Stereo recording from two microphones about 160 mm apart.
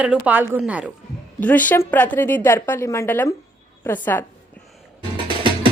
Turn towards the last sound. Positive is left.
turn(degrees=-30)  # may be behind; listen again after turning